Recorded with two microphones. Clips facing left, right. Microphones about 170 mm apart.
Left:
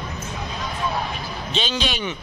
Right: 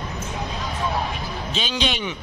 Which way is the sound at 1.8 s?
20° right (ahead or behind).